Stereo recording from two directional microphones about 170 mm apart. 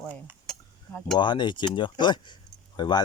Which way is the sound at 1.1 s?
25° left (ahead or behind).